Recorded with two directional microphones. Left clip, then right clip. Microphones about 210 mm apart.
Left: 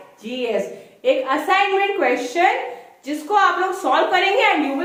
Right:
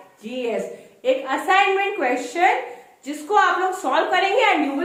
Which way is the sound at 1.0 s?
15° right (ahead or behind).